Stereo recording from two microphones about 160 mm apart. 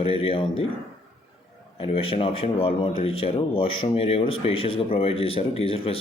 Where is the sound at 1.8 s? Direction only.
35° left (ahead or behind).